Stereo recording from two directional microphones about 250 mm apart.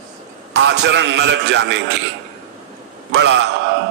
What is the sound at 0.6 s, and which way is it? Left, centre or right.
A man's voice, right.